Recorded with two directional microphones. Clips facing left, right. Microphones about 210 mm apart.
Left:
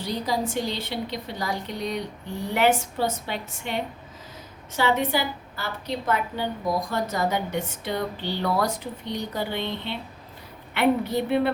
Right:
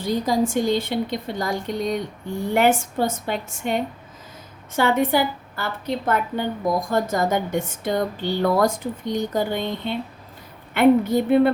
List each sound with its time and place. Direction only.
0.0 s a woman's voice: 45° right (ahead or behind)